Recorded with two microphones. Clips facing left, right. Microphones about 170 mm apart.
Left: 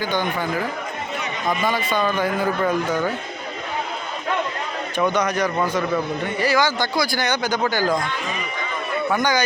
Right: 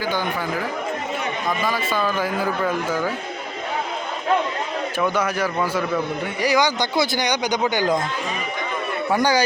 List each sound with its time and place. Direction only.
0.0 s speech: 5° right (ahead or behind)
1.5 s speech: centre (ahead or behind)
4.9 s speech: 5° right (ahead or behind)
9.1 s speech: 30° right (ahead or behind)